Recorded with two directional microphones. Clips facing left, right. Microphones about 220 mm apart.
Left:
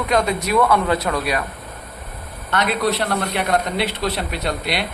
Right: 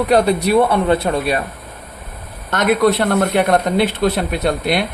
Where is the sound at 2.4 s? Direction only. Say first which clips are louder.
Right 6 dB; 50° right (ahead or behind).